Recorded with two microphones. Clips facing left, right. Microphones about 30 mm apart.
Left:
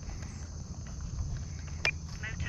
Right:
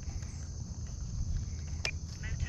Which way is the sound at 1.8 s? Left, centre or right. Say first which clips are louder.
Left 7 dB; left.